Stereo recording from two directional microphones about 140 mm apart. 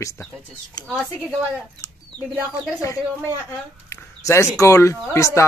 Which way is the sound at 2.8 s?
20° left (ahead or behind).